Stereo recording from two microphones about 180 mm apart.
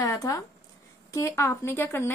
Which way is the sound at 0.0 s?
20° left (ahead or behind).